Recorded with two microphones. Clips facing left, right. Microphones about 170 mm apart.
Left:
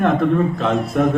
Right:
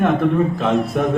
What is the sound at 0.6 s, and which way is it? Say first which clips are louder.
Speech: even; centre (ahead or behind).